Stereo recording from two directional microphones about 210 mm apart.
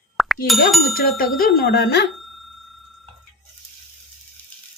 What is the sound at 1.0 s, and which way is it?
A woman's voice, 45° left (ahead or behind).